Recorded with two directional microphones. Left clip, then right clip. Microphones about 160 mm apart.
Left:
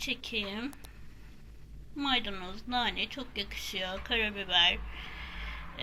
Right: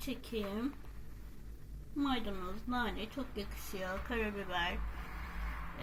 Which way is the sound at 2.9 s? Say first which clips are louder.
Left 7 dB; 60° left (ahead or behind).